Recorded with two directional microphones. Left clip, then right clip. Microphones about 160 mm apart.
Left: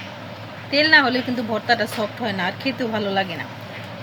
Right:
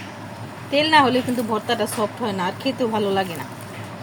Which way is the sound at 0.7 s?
20° right (ahead or behind).